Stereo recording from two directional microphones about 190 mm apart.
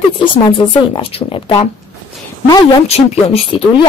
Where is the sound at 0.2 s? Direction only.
25° left (ahead or behind).